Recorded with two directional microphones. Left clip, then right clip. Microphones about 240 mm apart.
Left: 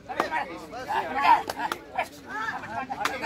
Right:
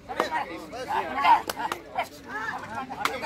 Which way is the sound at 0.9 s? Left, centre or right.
Centre.